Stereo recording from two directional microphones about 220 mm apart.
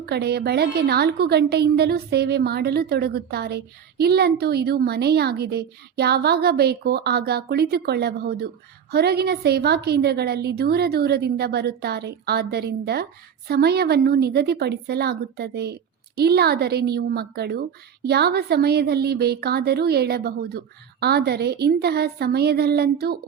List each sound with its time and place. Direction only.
0.0 s a woman's voice: 45° right (ahead or behind)